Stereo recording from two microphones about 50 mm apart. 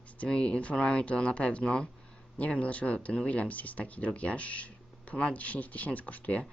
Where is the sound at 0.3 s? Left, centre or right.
Left.